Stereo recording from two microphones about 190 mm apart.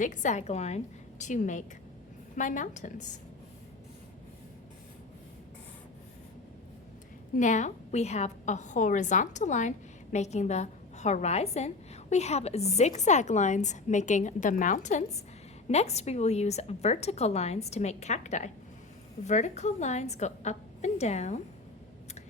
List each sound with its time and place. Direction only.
0.0 s a woman's voice: 40° left (ahead or behind)
7.3 s a woman's voice: 40° left (ahead or behind)